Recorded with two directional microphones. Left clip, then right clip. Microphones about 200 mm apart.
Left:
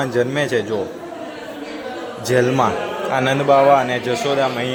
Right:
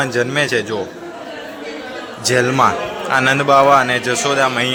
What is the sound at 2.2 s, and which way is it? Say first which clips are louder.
A man's voice: right 3 dB; 5° left (ahead or behind).